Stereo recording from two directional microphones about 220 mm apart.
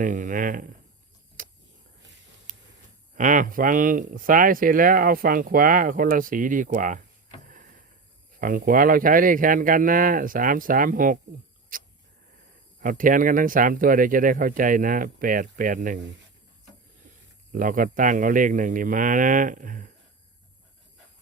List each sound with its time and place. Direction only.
0.0 s speech: 35° right (ahead or behind)
3.2 s speech: 35° right (ahead or behind)
7.4 s a sound: 40° right (ahead or behind)
8.4 s speech: 40° right (ahead or behind)
11.7 s a sound: 40° right (ahead or behind)
12.8 s speech: 35° right (ahead or behind)
17.5 s speech: 35° right (ahead or behind)